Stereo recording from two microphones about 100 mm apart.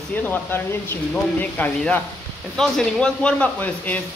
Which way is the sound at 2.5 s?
5° left (ahead or behind).